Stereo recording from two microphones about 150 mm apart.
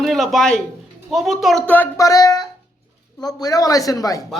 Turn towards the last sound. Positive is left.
turn(degrees=25)  # may be behind; listen again after turning